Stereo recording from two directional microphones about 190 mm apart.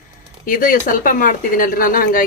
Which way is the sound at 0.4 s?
45° left (ahead or behind).